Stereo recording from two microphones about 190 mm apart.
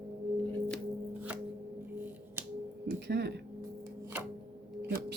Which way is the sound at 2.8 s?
60° right (ahead or behind).